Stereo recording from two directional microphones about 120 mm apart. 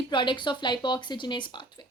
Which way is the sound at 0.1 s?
40° left (ahead or behind).